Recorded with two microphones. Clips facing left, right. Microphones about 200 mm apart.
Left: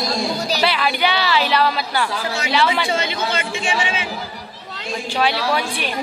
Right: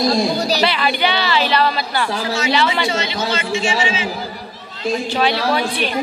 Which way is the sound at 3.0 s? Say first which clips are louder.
Right 1 dB; 55° left (ahead or behind).